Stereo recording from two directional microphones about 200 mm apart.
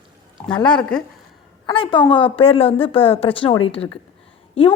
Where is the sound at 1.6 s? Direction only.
25° left (ahead or behind).